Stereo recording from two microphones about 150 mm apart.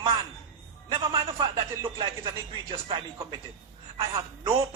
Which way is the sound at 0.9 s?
35° right (ahead or behind).